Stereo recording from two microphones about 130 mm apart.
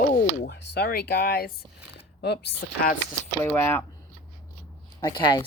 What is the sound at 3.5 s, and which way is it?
Speech, 15° left (ahead or behind).